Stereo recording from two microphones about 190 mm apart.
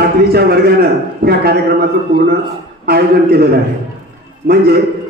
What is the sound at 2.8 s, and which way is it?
A man's voice, 55° right (ahead or behind).